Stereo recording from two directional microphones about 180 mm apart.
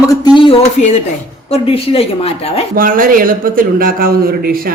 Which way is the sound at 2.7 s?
50° right (ahead or behind).